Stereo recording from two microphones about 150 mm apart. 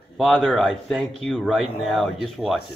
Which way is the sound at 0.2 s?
5° left (ahead or behind).